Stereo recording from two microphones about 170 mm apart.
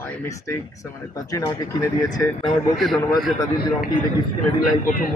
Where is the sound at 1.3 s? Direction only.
15° left (ahead or behind).